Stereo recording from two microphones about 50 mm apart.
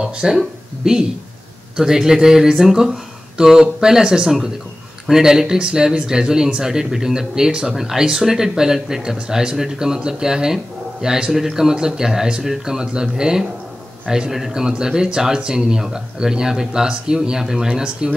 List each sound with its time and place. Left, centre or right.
0.0 s speech: centre